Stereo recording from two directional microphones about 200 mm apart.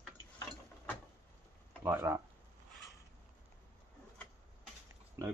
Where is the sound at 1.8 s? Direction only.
15° right (ahead or behind).